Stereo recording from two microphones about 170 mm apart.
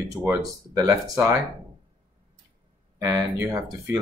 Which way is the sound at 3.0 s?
20° right (ahead or behind).